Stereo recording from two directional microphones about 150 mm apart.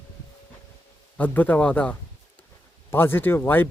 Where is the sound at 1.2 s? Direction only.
10° left (ahead or behind).